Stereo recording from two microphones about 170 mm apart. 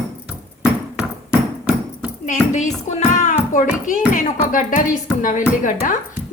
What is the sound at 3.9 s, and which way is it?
Speech, 50° left (ahead or behind).